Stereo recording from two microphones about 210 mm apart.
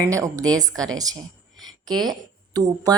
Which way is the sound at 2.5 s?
20° right (ahead or behind).